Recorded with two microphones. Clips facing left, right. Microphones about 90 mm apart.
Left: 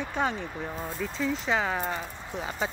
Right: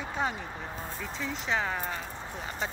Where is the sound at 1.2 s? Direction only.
Centre (ahead or behind).